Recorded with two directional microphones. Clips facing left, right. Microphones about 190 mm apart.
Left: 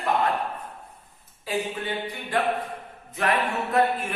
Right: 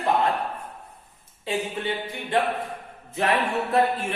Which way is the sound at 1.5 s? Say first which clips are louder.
Even; 25° right (ahead or behind).